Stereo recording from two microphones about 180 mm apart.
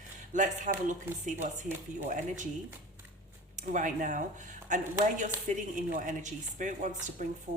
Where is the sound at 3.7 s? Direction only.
45° right (ahead or behind).